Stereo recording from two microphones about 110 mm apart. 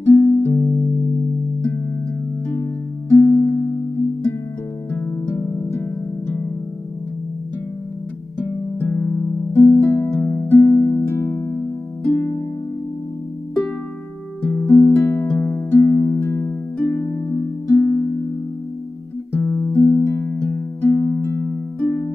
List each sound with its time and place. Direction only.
0.0 s music: 20° left (ahead or behind)
2.5 s music: 20° left (ahead or behind)
4.9 s music: 20° left (ahead or behind)
8.4 s music: 20° left (ahead or behind)
14.4 s music: 15° left (ahead or behind)
17.7 s harp: 25° left (ahead or behind)
19.3 s music: 20° left (ahead or behind)